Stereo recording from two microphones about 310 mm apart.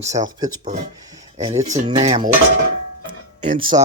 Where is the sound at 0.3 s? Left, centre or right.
Centre.